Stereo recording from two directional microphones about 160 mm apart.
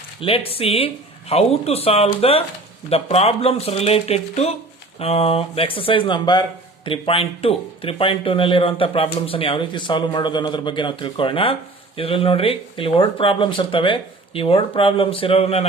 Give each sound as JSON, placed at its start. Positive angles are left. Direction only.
{"t": 0.2, "sound": "speech", "side_deg": 35}